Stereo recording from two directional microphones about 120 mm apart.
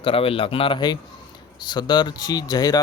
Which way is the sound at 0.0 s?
50° left (ahead or behind).